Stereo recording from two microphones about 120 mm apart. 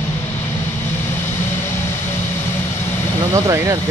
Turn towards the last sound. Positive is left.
turn(degrees=-25)  # may be behind; listen again after turning